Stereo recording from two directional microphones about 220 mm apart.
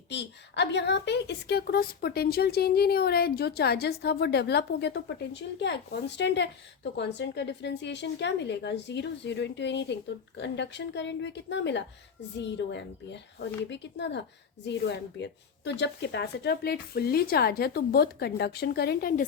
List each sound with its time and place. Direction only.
0.1 s a woman's voice: 50° left (ahead or behind)